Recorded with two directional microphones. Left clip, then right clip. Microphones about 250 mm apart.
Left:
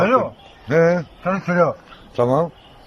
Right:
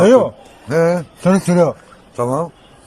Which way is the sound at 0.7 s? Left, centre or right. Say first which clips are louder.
Right 1 dB; centre.